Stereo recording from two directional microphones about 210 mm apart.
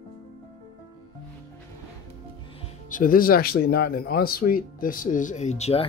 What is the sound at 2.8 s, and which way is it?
Speech, 40° left (ahead or behind).